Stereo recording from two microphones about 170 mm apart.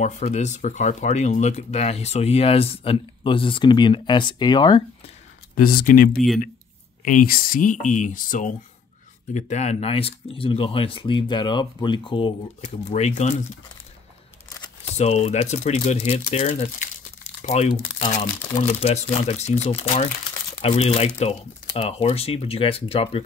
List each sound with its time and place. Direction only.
0.0 s speech: 45° left (ahead or behind); by 5.1 s 30° left (ahead or behind)
5.6 s speech: 55° left (ahead or behind)
7.1 s speech: 55° left (ahead or behind)
14.9 s speech: 40° left (ahead or behind)